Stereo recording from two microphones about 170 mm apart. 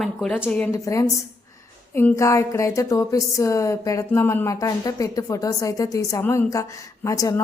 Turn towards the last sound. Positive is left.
turn(degrees=20)  # may be behind; listen again after turning